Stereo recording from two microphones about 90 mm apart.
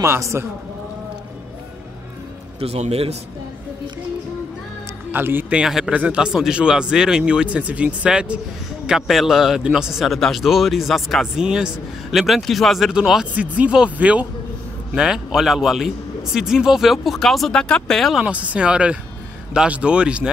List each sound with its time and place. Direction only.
0.0 s a man's voice: 30° right (ahead or behind)
5.1 s speech: 25° right (ahead or behind)
5.5 s a man's voice: 5° right (ahead or behind)
18.1 s speech: 15° right (ahead or behind)